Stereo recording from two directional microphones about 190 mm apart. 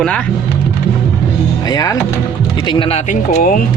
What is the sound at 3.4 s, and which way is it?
Speech, 45° left (ahead or behind).